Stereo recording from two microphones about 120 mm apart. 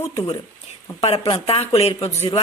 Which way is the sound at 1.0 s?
55° left (ahead or behind).